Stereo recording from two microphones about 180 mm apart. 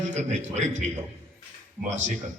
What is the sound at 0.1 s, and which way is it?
Speech, 40° right (ahead or behind).